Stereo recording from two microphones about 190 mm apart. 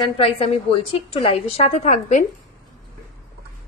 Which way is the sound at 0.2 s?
30° left (ahead or behind).